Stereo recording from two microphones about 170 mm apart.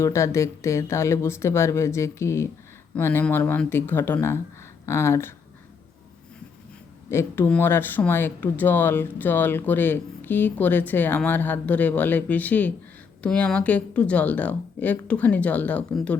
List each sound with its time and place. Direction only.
0.0 s speech: 15° left (ahead or behind)
7.1 s speech: 15° left (ahead or behind)